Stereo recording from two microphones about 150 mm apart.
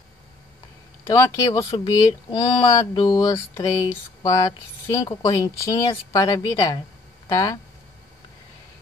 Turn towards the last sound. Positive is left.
turn(degrees=20)  # may be behind; listen again after turning